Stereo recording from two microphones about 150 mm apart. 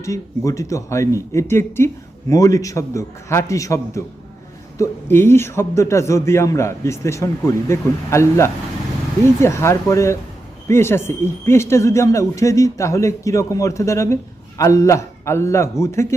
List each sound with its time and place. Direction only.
0.0 s a man's voice: 20° left (ahead or behind)